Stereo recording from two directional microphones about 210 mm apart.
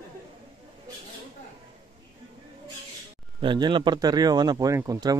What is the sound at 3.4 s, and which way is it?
Speech, 20° right (ahead or behind).